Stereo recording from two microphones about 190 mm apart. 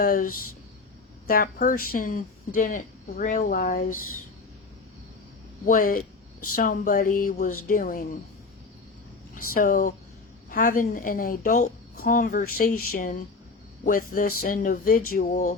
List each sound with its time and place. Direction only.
0.0 s speech: 50° left (ahead or behind)
5.6 s speech: 45° left (ahead or behind)
9.3 s speech: 45° left (ahead or behind)